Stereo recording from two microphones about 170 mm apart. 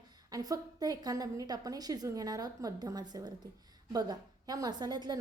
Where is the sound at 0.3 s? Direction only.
20° right (ahead or behind).